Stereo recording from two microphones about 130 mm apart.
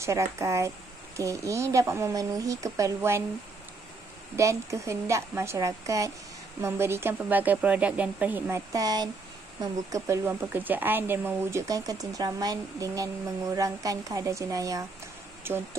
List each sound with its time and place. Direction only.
0.0 s a woman's voice: 20° right (ahead or behind)
4.4 s a woman's voice: 25° right (ahead or behind)